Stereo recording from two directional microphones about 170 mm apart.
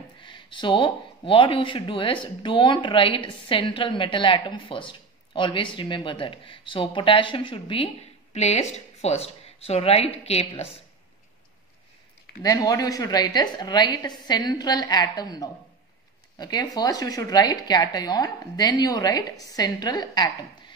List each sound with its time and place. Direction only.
0.2 s speech: 30° left (ahead or behind)
12.4 s a woman's voice: 20° left (ahead or behind)